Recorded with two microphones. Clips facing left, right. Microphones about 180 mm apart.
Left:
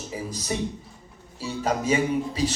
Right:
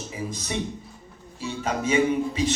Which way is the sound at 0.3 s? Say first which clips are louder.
Left 2 dB; 35° left (ahead or behind).